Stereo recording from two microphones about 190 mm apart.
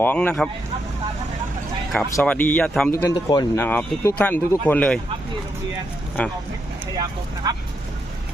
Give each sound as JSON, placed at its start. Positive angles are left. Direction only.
{"t": 0.0, "sound": "speech", "side_deg": 10}
{"t": 2.1, "sound": "speech", "side_deg": 10}
{"t": 6.2, "sound": "speech", "side_deg": 10}
{"t": 6.9, "sound": "speech", "side_deg": -20}